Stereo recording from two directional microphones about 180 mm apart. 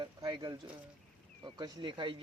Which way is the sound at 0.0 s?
25° right (ahead or behind).